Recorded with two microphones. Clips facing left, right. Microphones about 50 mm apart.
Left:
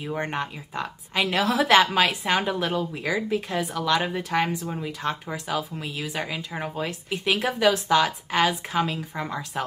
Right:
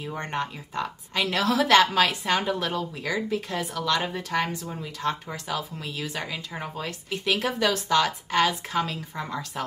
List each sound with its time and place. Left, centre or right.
0.0 s a woman's voice: centre